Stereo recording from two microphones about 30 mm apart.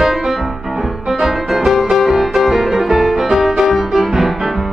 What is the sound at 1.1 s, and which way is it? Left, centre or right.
Music, centre.